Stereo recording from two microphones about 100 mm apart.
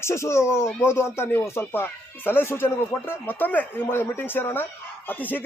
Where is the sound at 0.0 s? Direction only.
25° left (ahead or behind).